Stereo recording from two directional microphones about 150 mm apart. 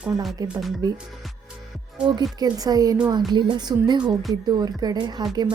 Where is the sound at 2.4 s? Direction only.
25° right (ahead or behind).